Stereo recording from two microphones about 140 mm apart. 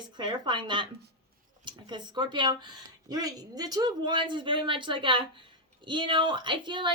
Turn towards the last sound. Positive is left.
turn(degrees=-35)  # may be behind; listen again after turning